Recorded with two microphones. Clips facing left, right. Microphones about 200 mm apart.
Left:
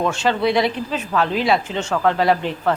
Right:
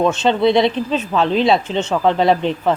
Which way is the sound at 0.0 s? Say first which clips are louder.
Right 4 dB; 20° right (ahead or behind).